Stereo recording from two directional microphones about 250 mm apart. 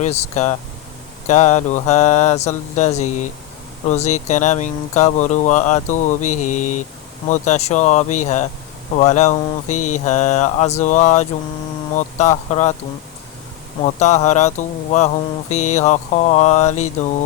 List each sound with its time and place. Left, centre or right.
0.0 s speech: left
13.8 s speech: left